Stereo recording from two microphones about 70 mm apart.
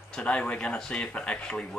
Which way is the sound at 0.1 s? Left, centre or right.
Centre.